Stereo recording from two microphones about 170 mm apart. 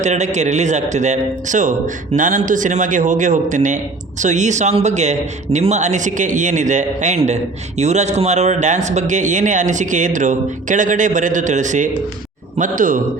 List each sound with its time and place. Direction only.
0.0 s a man's voice: 45° right (ahead or behind)